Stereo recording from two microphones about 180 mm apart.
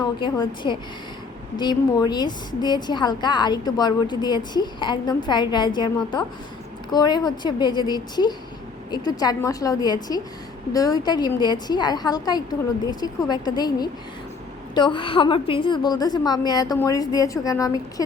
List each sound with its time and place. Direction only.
0.0 s a woman's voice: 25° left (ahead or behind)
6.9 s a woman's voice: 25° left (ahead or behind)